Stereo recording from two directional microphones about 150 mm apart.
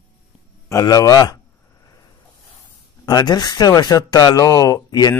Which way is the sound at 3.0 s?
25° left (ahead or behind).